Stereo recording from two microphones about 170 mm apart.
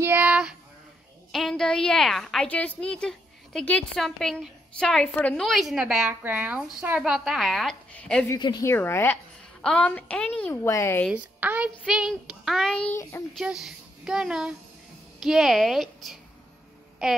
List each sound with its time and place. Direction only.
0.0 s a sound: 10° right (ahead or behind)
1.3 s a woman's voice: centre (ahead or behind)
8.3 s speech: 25° left (ahead or behind)
8.7 s a woman's voice: 15° left (ahead or behind)
11.1 s a woman's voice: 10° right (ahead or behind)
12.9 s a woman's voice: 15° left (ahead or behind)
13.4 s a woman's voice: 5° right (ahead or behind)